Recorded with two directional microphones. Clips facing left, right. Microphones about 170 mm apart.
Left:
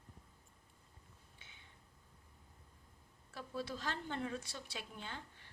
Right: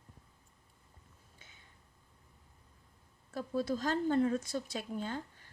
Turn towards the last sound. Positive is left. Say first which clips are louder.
# right 10 dB
turn(degrees=-40)  # may be behind; listen again after turning